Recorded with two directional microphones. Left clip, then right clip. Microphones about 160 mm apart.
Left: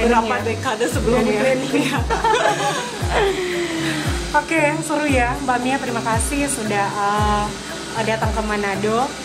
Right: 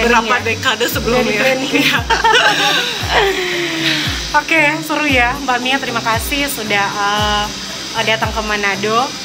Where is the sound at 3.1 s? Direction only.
40° right (ahead or behind).